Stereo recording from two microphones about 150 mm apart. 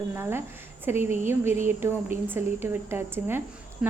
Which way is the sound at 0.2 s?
15° right (ahead or behind).